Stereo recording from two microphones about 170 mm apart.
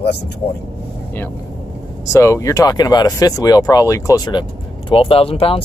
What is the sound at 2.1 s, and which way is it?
Speech, 15° left (ahead or behind).